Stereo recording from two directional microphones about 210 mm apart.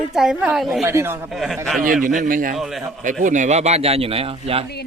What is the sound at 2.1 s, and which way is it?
Speech, 40° right (ahead or behind).